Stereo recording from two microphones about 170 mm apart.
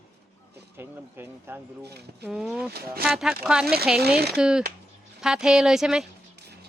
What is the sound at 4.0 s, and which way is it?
Speech, 65° right (ahead or behind).